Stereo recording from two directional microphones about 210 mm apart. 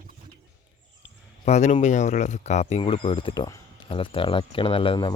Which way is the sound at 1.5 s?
35° left (ahead or behind).